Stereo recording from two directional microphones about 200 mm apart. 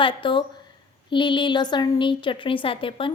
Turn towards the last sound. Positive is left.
turn(degrees=25)  # may be behind; listen again after turning